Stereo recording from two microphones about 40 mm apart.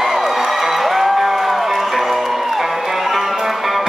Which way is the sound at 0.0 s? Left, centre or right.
Centre.